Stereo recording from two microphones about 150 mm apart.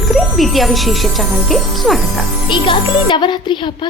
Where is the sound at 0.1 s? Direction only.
Centre (ahead or behind).